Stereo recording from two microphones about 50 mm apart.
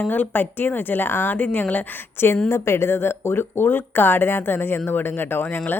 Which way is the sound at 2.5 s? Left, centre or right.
Left.